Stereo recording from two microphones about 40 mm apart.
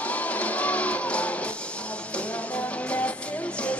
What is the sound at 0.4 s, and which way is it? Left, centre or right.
Music, left.